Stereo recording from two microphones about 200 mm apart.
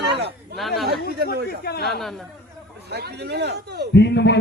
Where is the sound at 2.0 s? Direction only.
Centre (ahead or behind).